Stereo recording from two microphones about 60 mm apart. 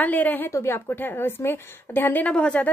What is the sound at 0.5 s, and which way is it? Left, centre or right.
A woman's voice, left.